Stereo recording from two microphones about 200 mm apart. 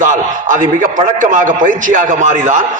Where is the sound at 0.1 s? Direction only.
40° right (ahead or behind).